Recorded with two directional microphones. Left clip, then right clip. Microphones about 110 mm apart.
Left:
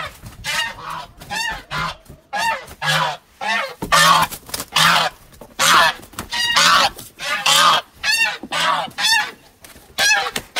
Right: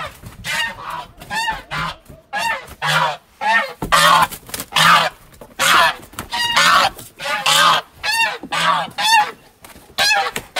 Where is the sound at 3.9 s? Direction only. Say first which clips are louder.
Right 1 dB; 10° right (ahead or behind).